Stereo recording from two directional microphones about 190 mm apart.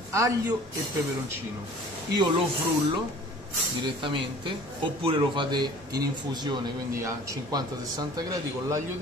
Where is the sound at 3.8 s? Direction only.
25° right (ahead or behind).